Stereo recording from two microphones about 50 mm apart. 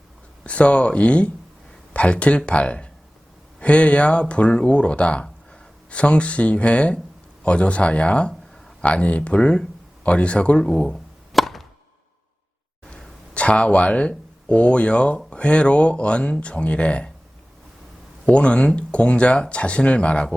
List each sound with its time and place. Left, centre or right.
0.4 s speech: left
8.3 s a sound: centre
8.8 s speech: left
10.9 s chop: centre
13.3 s speech: left
18.3 s speech: left